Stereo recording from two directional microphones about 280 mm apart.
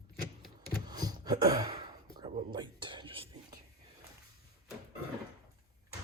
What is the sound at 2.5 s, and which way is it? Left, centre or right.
Whispering, centre.